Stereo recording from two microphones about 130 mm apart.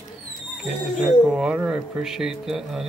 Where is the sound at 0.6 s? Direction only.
5° right (ahead or behind).